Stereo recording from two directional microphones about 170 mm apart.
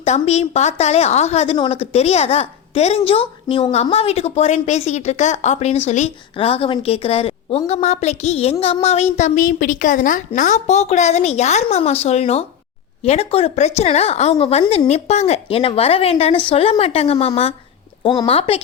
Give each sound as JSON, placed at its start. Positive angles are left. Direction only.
{"t": 0.0, "sound": "a child's voice", "side_deg": 40}